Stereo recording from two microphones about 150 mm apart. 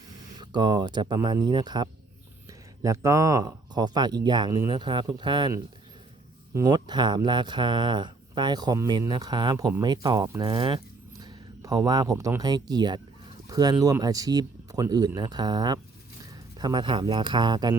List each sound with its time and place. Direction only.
0.3 s speech: 30° right (ahead or behind)
6.5 s a man's voice: 25° right (ahead or behind)